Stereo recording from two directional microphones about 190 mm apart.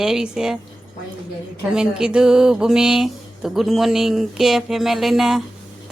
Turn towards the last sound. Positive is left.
turn(degrees=0)  # may be behind; listen again after turning